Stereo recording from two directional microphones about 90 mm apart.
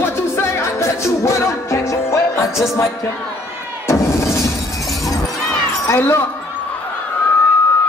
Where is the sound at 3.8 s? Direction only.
30° left (ahead or behind).